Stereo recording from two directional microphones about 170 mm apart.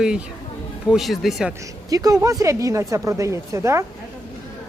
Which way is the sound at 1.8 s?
20° right (ahead or behind).